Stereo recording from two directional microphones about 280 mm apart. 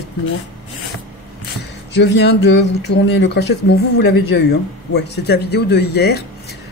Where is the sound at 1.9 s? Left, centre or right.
Left.